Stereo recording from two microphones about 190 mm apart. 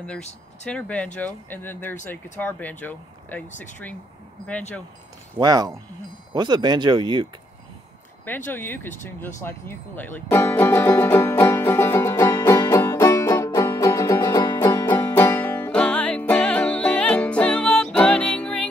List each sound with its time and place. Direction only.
0.7 s speech: 5° left (ahead or behind)
5.4 s speech: 20° right (ahead or behind)
8.5 s speech: 10° left (ahead or behind)
9.4 s music: 10° left (ahead or behind)